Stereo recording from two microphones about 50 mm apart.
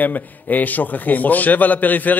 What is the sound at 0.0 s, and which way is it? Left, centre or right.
A man's voice, left.